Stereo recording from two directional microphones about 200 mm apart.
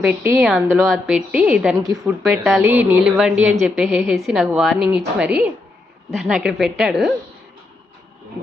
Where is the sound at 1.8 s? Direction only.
15° right (ahead or behind).